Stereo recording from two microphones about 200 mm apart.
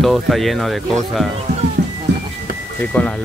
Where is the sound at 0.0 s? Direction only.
Centre (ahead or behind).